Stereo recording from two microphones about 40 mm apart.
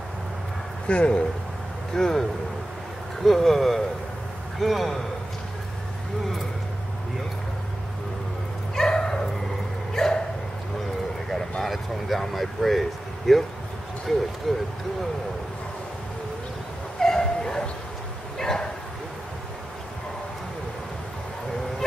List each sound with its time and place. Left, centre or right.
0.8 s speech: left
2.0 s speech: centre
3.3 s speech: centre
8.7 s bow-wow: centre
11.3 s a sound: centre
11.7 s speech: centre
17.0 s a sound: centre
18.4 s bow-wow: centre